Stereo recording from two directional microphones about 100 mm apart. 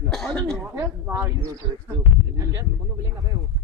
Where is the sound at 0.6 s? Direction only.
25° right (ahead or behind).